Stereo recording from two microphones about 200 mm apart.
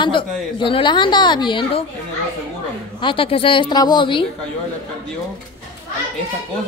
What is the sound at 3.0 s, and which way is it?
A woman's voice, 25° left (ahead or behind).